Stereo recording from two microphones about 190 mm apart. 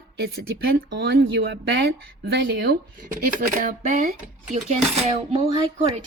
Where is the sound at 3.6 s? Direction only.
40° right (ahead or behind).